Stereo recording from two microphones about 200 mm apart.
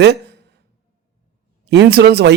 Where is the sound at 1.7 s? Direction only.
60° right (ahead or behind).